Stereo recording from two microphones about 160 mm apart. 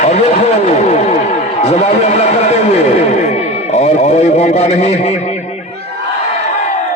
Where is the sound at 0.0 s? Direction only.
45° left (ahead or behind).